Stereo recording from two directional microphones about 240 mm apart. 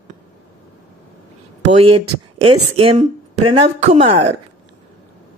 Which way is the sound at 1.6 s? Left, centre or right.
Right.